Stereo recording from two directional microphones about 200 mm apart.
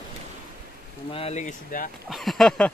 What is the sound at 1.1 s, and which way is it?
Rain, 30° left (ahead or behind).